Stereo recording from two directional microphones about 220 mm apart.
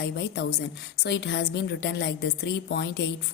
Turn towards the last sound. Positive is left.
turn(degrees=50)  # may be behind; listen again after turning